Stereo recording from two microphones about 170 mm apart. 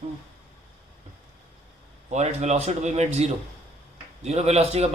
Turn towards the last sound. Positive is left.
turn(degrees=-40)  # may be behind; listen again after turning